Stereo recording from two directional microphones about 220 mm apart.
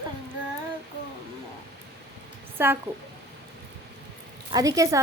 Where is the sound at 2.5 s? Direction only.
10° right (ahead or behind).